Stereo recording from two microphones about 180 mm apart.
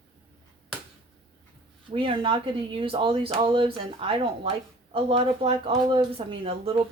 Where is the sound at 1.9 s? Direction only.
30° right (ahead or behind).